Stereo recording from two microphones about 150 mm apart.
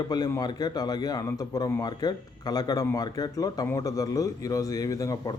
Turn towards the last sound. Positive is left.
turn(degrees=20)  # may be behind; listen again after turning